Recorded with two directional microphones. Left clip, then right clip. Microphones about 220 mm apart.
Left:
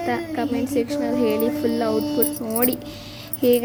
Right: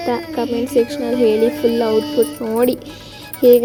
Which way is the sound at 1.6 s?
Centre (ahead or behind).